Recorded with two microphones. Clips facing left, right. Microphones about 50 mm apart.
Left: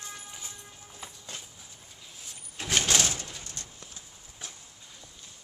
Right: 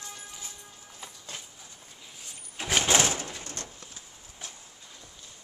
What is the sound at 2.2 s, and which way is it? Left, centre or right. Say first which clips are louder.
Door: right 2 dB; centre.